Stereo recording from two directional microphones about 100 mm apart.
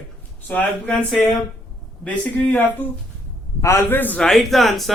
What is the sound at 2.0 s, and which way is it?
Speech, 15° left (ahead or behind).